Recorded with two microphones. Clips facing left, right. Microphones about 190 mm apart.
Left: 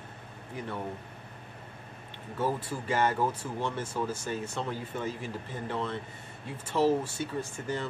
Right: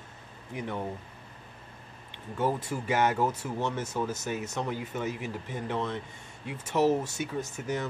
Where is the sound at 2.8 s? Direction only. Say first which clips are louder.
Right 1 dB; 10° right (ahead or behind).